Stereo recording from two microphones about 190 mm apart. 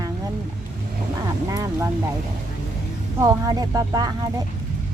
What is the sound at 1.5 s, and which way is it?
Speech, 15° right (ahead or behind).